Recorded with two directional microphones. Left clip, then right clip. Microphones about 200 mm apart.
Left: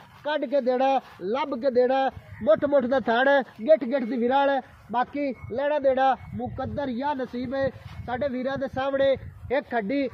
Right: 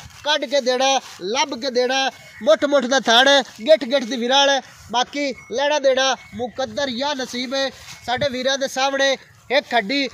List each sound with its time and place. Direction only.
0.2 s a man's voice: 40° right (ahead or behind)